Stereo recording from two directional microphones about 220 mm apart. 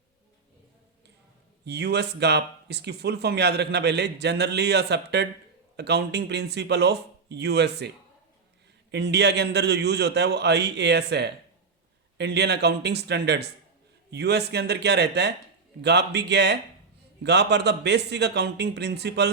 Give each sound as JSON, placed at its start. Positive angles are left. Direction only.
{"t": 1.6, "sound": "speech", "side_deg": -50}